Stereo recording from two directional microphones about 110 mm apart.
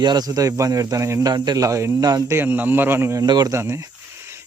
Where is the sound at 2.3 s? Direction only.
20° right (ahead or behind).